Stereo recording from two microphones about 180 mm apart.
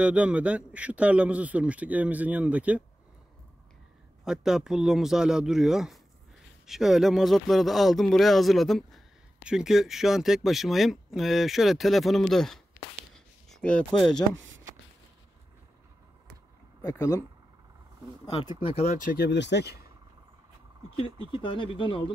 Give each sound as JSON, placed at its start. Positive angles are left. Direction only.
{"t": 0.0, "sound": "a man's voice", "side_deg": -5}
{"t": 4.2, "sound": "speech", "side_deg": -5}
{"t": 13.1, "sound": "a sound", "side_deg": 5}
{"t": 16.8, "sound": "speech", "side_deg": 20}
{"t": 18.2, "sound": "speech", "side_deg": 30}
{"t": 19.1, "sound": "speech", "side_deg": 70}
{"t": 21.3, "sound": "speech", "side_deg": 30}